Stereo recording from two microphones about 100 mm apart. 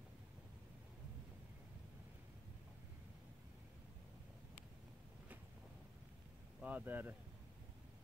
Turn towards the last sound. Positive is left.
turn(degrees=-20)  # may be behind; listen again after turning